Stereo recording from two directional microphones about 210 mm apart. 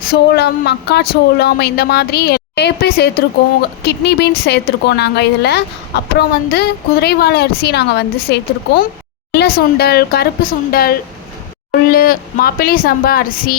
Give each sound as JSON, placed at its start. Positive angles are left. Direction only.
{"t": 0.1, "sound": "speech", "side_deg": 50}